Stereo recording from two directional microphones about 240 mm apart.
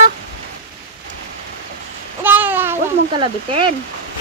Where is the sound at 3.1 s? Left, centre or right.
Right.